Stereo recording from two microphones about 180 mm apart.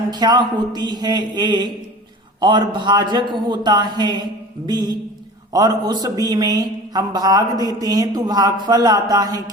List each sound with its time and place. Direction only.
0.1 s a man's voice: 25° right (ahead or behind)